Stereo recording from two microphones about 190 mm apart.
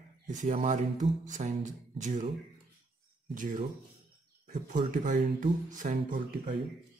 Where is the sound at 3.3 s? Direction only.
45° right (ahead or behind).